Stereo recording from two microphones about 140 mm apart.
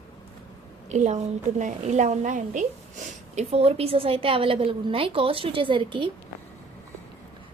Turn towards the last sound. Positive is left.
turn(degrees=-35)  # may be behind; listen again after turning